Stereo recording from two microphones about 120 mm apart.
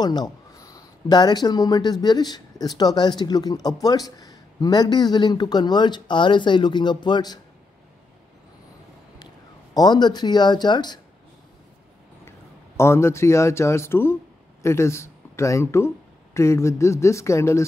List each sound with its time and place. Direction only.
0.0 s speech: 35° left (ahead or behind)
9.8 s speech: 35° left (ahead or behind)
12.3 s speech: 20° left (ahead or behind)